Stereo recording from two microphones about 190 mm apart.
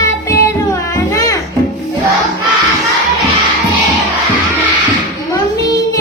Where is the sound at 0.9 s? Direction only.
15° left (ahead or behind).